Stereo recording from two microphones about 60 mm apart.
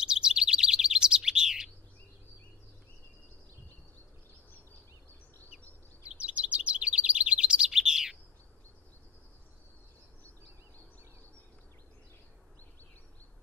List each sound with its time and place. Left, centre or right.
0.0 s chirp: centre
6.1 s chirp: right